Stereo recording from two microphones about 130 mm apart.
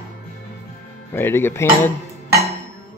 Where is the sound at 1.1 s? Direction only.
15° left (ahead or behind).